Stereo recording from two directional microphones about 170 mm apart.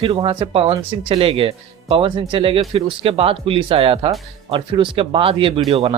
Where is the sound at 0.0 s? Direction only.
30° right (ahead or behind).